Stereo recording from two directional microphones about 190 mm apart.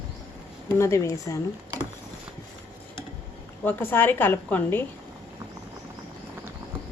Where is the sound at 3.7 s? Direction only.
10° left (ahead or behind).